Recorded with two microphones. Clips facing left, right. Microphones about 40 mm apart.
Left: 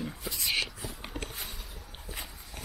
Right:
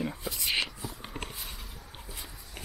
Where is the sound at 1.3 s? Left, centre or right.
Centre.